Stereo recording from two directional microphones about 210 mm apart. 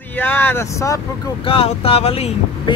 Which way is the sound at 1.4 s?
25° left (ahead or behind).